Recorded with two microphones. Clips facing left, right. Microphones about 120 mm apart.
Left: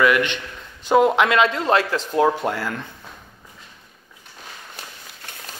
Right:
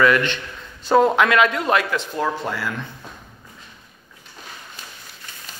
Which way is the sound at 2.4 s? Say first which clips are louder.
Left 2 dB; 50° left (ahead or behind).